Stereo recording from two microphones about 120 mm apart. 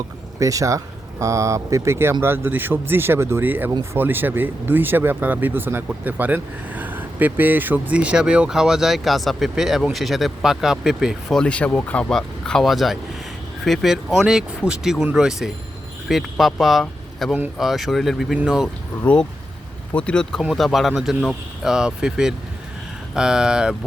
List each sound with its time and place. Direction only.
0.3 s speech: 25° right (ahead or behind); by 16.8 s centre (ahead or behind)
16.8 s a sound: 5° left (ahead or behind)
17.6 s speech: centre (ahead or behind)
19.0 s speech: 10° left (ahead or behind); by 23.7 s 5° right (ahead or behind)